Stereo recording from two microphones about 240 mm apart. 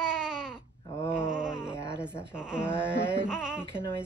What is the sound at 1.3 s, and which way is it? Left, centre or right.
Baby cry, centre.